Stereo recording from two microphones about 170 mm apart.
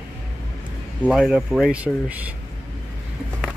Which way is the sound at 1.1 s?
5° right (ahead or behind).